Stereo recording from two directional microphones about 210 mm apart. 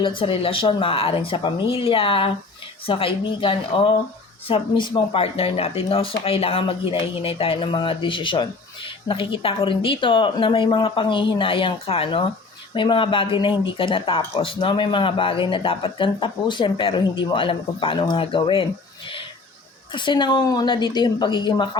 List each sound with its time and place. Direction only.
0.0 s speech: 25° left (ahead or behind)